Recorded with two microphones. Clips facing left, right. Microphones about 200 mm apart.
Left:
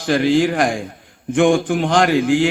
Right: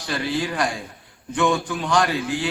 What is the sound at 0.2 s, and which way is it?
Speech, 90° left.